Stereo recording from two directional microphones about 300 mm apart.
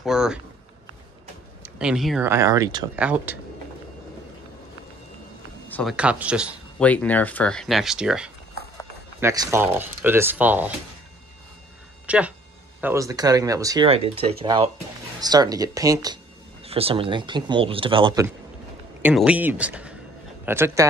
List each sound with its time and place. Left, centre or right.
0.0 s a sound: centre
1.6 s speech: centre
5.7 s speech: centre
12.1 s speech: centre